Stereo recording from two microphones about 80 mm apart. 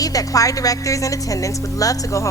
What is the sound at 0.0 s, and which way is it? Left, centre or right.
A woman's voice, left.